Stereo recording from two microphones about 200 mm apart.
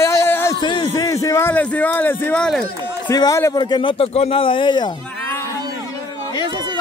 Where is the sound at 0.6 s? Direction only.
25° left (ahead or behind).